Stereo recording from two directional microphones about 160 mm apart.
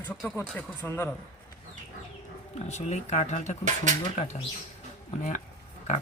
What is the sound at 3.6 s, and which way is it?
Speech, 50° right (ahead or behind).